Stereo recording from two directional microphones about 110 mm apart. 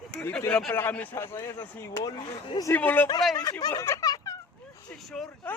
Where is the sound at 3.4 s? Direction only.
35° left (ahead or behind).